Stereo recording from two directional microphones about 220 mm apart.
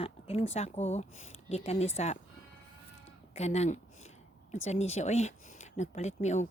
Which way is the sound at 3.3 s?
30° left (ahead or behind).